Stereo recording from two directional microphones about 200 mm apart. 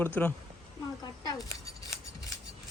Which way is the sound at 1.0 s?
20° left (ahead or behind).